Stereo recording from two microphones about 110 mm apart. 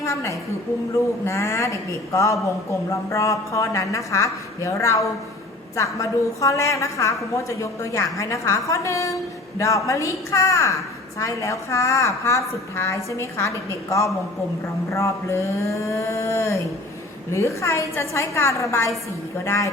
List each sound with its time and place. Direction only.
0.0 s a woman's voice: 30° left (ahead or behind)